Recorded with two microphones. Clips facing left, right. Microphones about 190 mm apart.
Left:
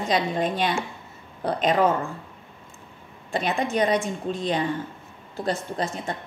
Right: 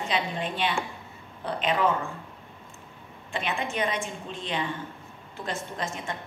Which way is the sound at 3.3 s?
35° left (ahead or behind).